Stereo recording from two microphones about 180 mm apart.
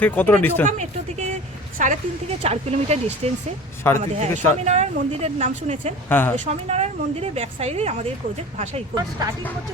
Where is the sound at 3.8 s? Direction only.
15° left (ahead or behind).